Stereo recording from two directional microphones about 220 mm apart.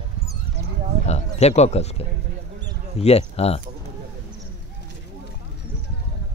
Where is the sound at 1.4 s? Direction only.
30° left (ahead or behind).